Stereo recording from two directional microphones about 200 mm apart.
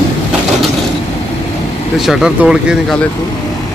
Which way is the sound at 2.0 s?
Centre (ahead or behind).